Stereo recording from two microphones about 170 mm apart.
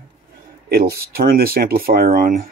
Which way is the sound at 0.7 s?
65° right (ahead or behind).